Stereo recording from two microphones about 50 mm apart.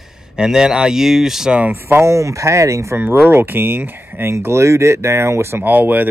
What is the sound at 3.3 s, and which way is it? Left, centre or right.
Speech, right.